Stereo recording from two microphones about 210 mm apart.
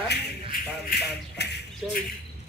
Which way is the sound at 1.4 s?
50° left (ahead or behind).